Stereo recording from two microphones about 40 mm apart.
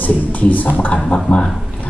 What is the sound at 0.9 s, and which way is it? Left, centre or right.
Speech, left.